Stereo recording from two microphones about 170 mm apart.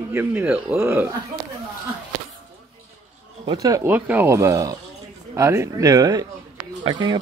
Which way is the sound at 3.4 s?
20° right (ahead or behind).